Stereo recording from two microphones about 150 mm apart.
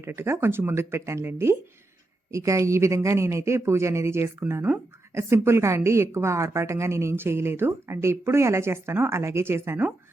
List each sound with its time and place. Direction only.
0.0 s speech: 15° right (ahead or behind)